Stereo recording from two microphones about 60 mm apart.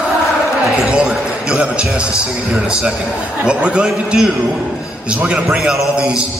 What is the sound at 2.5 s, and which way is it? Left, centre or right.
A man's voice, centre.